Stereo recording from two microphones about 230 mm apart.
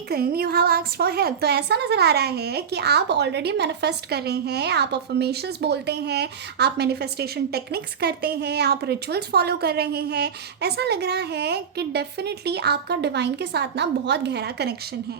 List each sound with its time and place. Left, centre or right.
0.1 s a woman's voice: right